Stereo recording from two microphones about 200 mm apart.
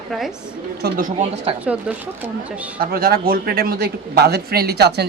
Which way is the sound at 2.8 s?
45° right (ahead or behind).